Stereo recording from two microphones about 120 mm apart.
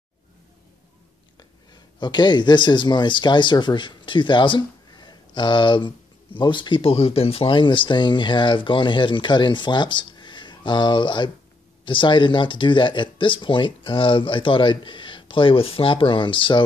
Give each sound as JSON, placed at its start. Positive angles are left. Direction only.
{"t": 1.7, "sound": "speech", "side_deg": 40}